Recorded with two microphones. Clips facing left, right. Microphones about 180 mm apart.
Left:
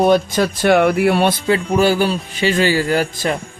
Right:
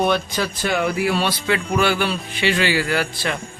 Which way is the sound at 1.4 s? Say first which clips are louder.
Left 5 dB; 35° left (ahead or behind).